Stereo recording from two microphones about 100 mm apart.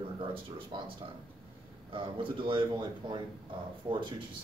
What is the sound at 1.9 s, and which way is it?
Speech, 60° right (ahead or behind).